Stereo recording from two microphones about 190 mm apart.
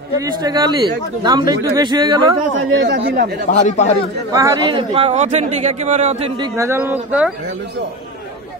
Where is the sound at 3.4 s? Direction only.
40° left (ahead or behind).